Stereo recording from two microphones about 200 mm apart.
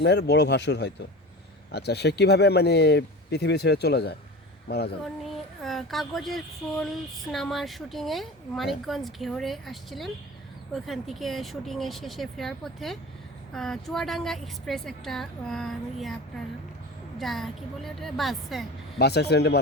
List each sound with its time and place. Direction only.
0.0 s speech: 55° left (ahead or behind)
5.2 s speech: centre (ahead or behind)
17.2 s speech: centre (ahead or behind)
18.9 s speech: 55° left (ahead or behind)